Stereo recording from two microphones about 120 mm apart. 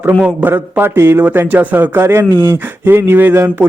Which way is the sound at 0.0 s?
15° right (ahead or behind).